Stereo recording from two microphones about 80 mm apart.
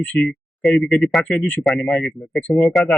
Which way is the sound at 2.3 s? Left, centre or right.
Centre.